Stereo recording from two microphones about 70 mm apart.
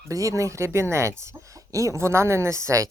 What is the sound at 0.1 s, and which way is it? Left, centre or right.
Speech, right.